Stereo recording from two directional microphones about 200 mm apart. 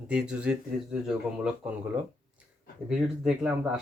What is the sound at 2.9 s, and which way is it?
Speech, 5° right (ahead or behind).